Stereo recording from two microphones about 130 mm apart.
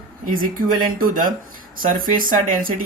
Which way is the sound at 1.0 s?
90° right.